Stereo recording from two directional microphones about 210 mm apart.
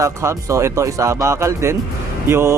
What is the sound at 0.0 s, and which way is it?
A man's voice, 15° right (ahead or behind).